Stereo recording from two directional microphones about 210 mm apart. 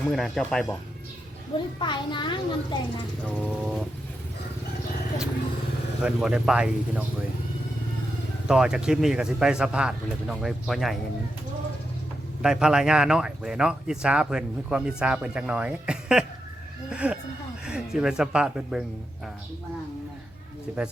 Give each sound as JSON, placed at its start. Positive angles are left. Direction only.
{"t": 0.1, "sound": "speech", "side_deg": 0}
{"t": 1.8, "sound": "a child's voice", "side_deg": 20}
{"t": 3.4, "sound": "speech", "side_deg": 0}
{"t": 6.0, "sound": "speech", "side_deg": -5}
{"t": 8.4, "sound": "speech", "side_deg": -5}
{"t": 12.4, "sound": "speech", "side_deg": -5}
{"t": 20.7, "sound": "speech", "side_deg": -5}